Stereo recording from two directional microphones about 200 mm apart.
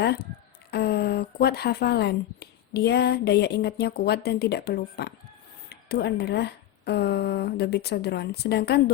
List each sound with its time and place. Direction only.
0.0 s speech: 55° left (ahead or behind)